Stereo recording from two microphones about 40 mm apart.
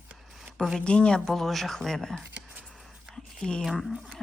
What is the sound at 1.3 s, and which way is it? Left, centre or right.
Speech, centre.